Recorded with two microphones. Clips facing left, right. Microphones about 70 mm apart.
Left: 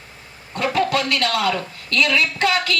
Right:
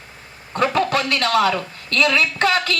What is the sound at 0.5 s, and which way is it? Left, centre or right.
A woman's voice, right.